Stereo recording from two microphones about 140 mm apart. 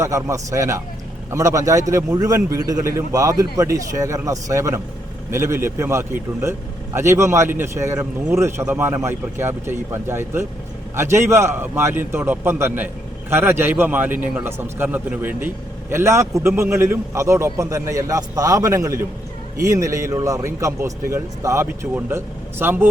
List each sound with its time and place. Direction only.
0.0 s a man's voice: 20° right (ahead or behind)